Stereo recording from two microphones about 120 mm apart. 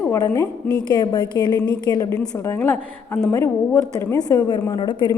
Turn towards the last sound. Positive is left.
turn(degrees=40)  # may be behind; listen again after turning